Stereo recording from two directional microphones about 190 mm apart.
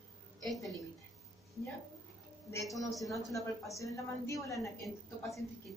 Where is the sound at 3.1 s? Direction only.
15° left (ahead or behind).